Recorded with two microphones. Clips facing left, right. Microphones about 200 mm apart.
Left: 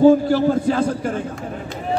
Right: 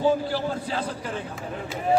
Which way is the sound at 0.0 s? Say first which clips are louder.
Left 10 dB; 45° left (ahead or behind).